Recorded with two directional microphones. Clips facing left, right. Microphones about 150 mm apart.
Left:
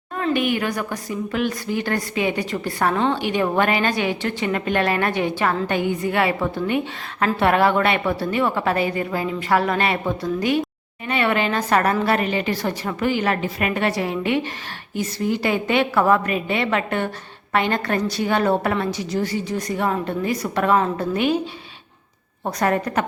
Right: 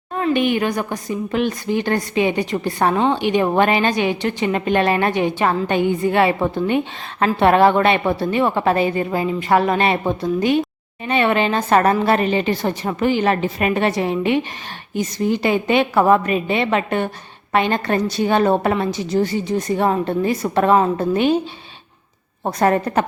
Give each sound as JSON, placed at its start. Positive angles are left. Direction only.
{"t": 0.2, "sound": "a woman's voice", "side_deg": -25}
{"t": 22.4, "sound": "a woman's voice", "side_deg": -30}